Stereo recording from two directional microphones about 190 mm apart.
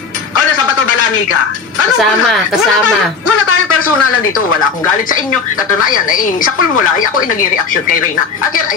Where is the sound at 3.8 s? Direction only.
90° left.